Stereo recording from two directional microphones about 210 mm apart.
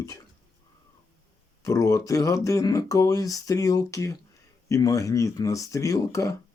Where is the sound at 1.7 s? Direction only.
15° left (ahead or behind).